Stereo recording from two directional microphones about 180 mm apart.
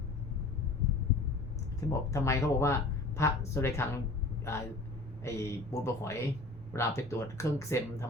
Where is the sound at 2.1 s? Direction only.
15° left (ahead or behind).